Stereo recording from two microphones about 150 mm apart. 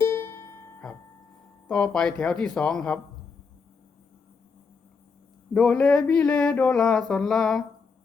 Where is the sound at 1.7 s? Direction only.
5° left (ahead or behind).